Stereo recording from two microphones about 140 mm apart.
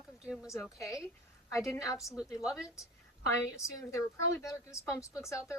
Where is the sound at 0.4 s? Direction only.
20° left (ahead or behind).